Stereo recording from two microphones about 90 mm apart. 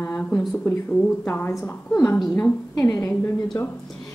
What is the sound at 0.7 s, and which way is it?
A woman's voice, 25° left (ahead or behind).